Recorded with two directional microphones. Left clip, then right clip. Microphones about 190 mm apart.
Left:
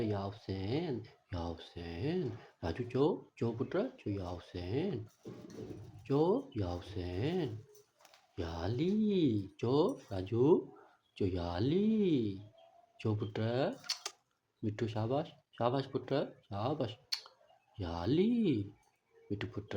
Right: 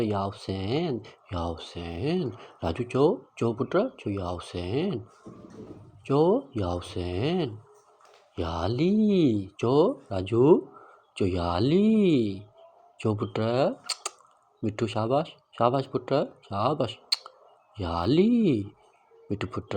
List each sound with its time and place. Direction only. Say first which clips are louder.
0.0 s speech: right 10 dB; 25° right (ahead or behind)
6.1 s speech: right 9 dB; 25° right (ahead or behind)